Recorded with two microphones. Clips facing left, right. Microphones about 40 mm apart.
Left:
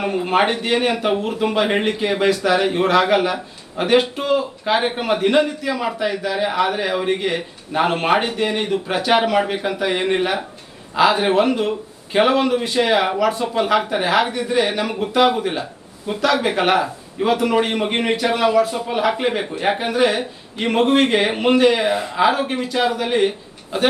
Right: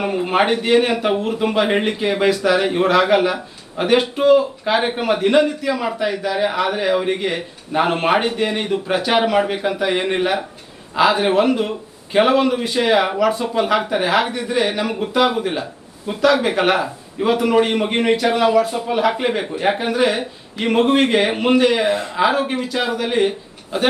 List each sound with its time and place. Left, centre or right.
0.0 s speech: centre